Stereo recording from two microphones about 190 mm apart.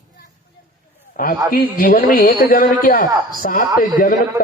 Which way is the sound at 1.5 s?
50° left (ahead or behind).